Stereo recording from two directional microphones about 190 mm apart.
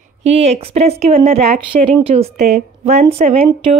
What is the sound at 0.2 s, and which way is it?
A woman's voice, 35° right (ahead or behind).